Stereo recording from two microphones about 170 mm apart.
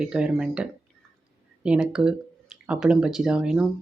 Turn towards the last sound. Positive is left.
turn(degrees=-5)  # may be behind; listen again after turning